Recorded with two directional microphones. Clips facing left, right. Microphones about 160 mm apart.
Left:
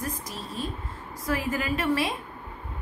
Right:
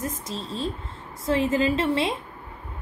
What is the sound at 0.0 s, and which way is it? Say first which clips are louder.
A woman's voice: right 3 dB; 25° right (ahead or behind).